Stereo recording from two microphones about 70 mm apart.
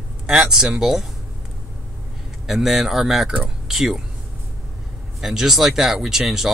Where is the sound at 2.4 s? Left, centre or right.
Centre.